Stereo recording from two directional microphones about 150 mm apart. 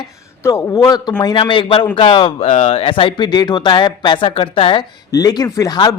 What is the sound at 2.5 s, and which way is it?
Speech, 45° left (ahead or behind).